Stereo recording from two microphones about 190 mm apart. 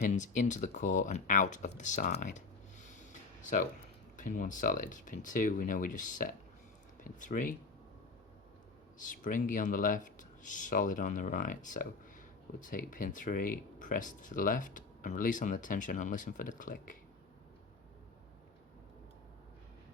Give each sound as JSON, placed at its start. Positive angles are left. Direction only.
{"t": 0.0, "sound": "speech", "side_deg": 40}
{"t": 9.0, "sound": "speech", "side_deg": 45}